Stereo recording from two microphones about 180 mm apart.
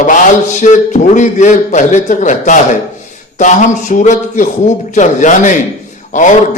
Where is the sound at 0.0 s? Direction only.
45° left (ahead or behind).